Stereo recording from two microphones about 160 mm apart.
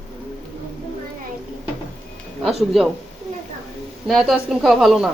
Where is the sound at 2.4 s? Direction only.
Centre (ahead or behind).